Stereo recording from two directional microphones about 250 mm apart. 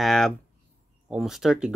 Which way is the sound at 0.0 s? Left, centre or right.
Centre.